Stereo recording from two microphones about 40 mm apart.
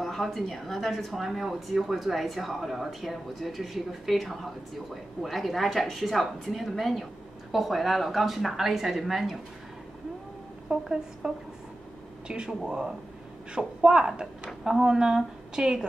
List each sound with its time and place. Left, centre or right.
0.0 s speech: centre
10.7 s a woman's voice: right